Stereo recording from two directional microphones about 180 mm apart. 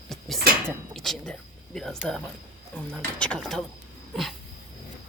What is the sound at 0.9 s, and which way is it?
Speech, centre (ahead or behind).